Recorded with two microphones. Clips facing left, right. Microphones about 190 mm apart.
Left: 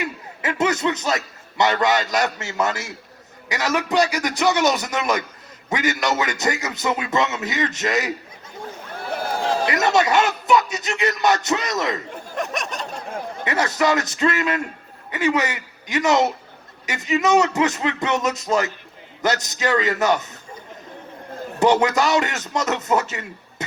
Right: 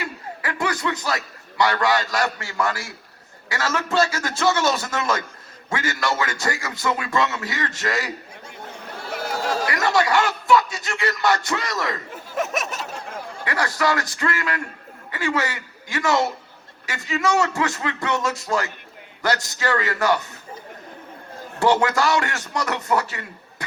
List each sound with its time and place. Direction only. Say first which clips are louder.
0.0 s a man's voice: left 3 dB; 20° left (ahead or behind)
9.6 s a man's voice: left 2 dB; 20° left (ahead or behind)
12.1 s a sound: right 1 dB; 5° right (ahead or behind)
13.4 s a man's voice: left 2 dB; 20° left (ahead or behind)
21.6 s a man's voice: left 2 dB; 20° left (ahead or behind)